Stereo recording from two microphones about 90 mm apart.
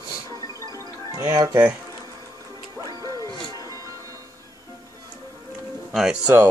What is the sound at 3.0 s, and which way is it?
Music, 45° right (ahead or behind).